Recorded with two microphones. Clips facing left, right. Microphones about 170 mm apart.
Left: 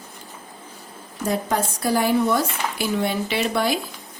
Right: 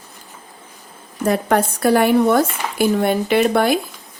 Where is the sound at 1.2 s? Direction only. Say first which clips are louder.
Right 6 dB; 65° right (ahead or behind).